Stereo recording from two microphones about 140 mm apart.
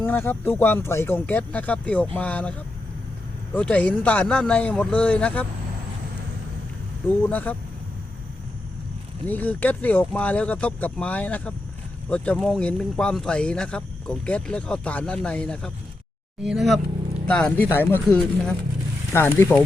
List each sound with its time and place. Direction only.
0.0 s speech: 15° left (ahead or behind)
7.3 s speech: 10° left (ahead or behind)
9.2 s speech: 10° left (ahead or behind)
16.4 s speech: 5° right (ahead or behind)
17.2 s speech: 10° left (ahead or behind)